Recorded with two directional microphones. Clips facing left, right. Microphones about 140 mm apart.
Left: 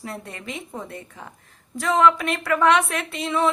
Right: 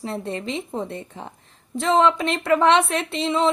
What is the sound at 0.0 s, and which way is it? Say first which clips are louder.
A woman's voice: right 7 dB; 25° right (ahead or behind).